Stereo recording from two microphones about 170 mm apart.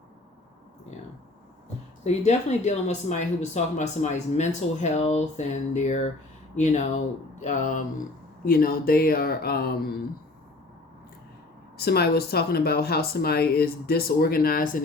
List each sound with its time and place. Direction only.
2.0 s speech: 40° left (ahead or behind)
8.4 s speech: 60° left (ahead or behind)
11.8 s speech: 65° left (ahead or behind)